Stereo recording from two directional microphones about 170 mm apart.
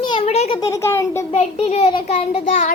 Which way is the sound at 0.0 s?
30° left (ahead or behind).